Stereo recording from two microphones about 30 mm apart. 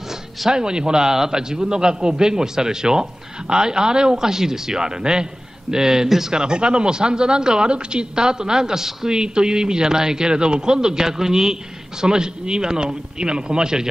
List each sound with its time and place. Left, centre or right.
0.5 s a man's voice: right